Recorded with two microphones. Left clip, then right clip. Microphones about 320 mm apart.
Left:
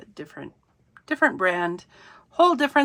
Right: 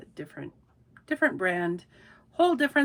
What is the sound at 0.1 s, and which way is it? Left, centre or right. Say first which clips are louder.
A woman's voice: left 2 dB; centre.